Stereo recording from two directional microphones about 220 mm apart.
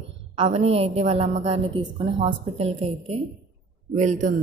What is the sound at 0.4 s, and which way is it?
A woman's voice, 30° right (ahead or behind).